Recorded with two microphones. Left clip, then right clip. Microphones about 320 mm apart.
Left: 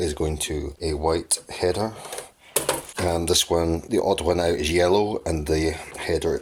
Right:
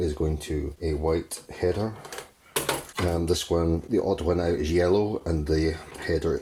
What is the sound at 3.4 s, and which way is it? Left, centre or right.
Speech, left.